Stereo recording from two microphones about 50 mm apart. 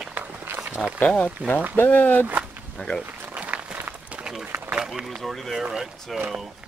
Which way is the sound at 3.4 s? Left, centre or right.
Right.